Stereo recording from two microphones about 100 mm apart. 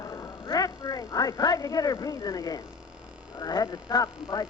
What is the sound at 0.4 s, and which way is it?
Speech, 40° left (ahead or behind).